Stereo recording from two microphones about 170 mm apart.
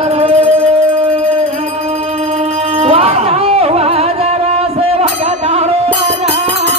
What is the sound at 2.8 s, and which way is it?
Music, 35° right (ahead or behind).